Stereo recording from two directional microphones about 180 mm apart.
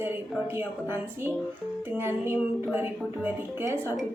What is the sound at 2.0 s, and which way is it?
A woman's voice, 10° right (ahead or behind).